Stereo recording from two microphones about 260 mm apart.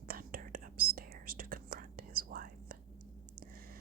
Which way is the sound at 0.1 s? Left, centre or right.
Right.